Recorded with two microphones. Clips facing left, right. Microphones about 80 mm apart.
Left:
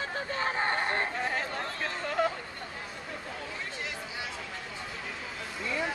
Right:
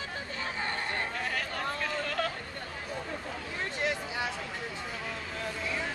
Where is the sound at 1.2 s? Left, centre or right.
Left.